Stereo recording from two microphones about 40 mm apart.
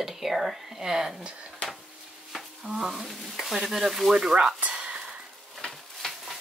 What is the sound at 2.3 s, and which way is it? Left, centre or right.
Stir, centre.